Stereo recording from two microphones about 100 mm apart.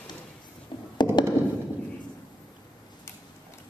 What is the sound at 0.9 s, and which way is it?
Tap, 45° left (ahead or behind).